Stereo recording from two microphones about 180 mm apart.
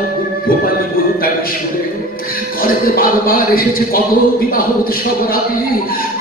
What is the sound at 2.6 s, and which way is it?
Music, 55° left (ahead or behind).